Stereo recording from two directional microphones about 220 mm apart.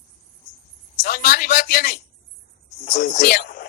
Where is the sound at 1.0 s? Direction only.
45° left (ahead or behind).